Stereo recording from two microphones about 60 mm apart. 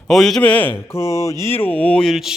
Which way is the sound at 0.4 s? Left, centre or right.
Left.